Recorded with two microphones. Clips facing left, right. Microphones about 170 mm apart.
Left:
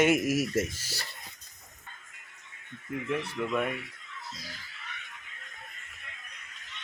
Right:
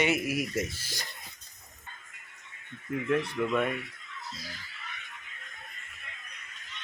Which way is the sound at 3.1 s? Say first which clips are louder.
Right 3 dB; 5° left (ahead or behind).